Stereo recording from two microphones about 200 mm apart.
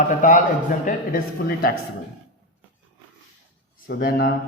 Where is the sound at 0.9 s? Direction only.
45° left (ahead or behind).